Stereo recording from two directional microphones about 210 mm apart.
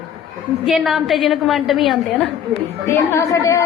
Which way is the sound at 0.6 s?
Centre (ahead or behind).